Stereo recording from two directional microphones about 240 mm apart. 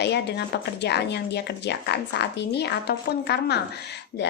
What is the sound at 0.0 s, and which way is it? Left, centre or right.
A woman's voice, left.